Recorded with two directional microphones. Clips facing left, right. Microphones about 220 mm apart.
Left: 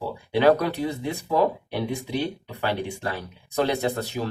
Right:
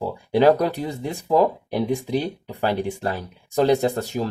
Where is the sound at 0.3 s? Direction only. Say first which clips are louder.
Right 3 dB; 40° right (ahead or behind).